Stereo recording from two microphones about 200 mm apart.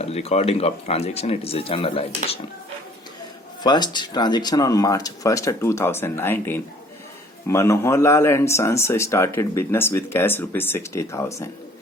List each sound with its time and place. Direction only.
0.0 s speech: 30° left (ahead or behind)
3.6 s speech: 20° left (ahead or behind)